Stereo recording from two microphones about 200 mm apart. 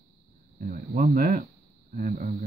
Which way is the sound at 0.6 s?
45° right (ahead or behind).